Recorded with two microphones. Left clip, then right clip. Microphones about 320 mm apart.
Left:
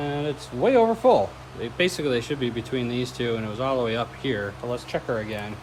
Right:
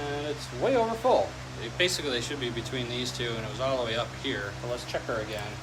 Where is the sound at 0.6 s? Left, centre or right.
Left.